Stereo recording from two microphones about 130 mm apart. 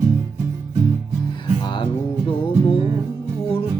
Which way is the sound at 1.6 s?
40° left (ahead or behind).